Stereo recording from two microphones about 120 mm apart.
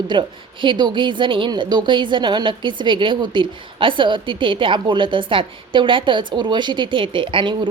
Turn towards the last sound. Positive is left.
turn(degrees=-45)  # may be behind; listen again after turning